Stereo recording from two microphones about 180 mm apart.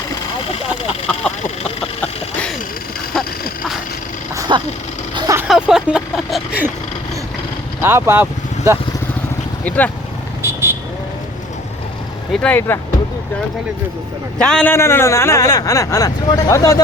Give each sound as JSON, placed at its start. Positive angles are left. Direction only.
{"t": 4.4, "sound": "a sound", "side_deg": -25}
{"t": 5.1, "sound": "vehicle", "side_deg": -20}
{"t": 5.5, "sound": "speech", "side_deg": -5}
{"t": 7.8, "sound": "speech", "side_deg": -15}
{"t": 9.6, "sound": "a man's voice", "side_deg": 10}
{"t": 10.4, "sound": "vehicle", "side_deg": -15}
{"t": 12.3, "sound": "a man's voice", "side_deg": 5}
{"t": 14.3, "sound": "a man's voice", "side_deg": 5}